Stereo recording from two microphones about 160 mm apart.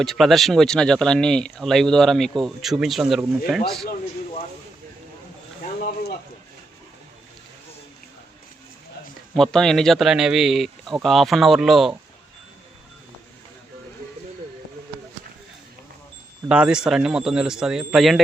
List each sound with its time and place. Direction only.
0.0 s speech: centre (ahead or behind)
5.8 s a sound: 75° left (ahead or behind)
9.3 s speech: 5° left (ahead or behind)
16.5 s speech: 5° right (ahead or behind)